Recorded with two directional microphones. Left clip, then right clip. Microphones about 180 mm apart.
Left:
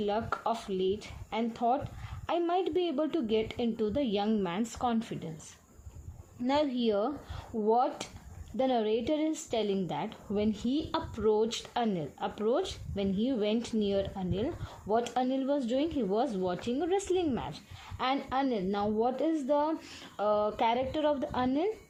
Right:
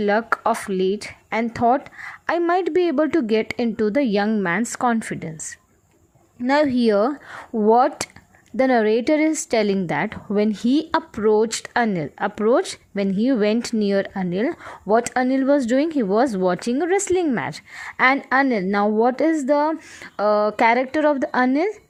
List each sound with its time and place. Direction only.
0.0 s speech: 45° right (ahead or behind)
6.5 s speech: 40° right (ahead or behind)